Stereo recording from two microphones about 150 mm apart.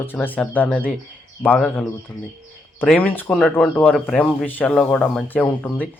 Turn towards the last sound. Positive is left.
turn(degrees=10)  # may be behind; listen again after turning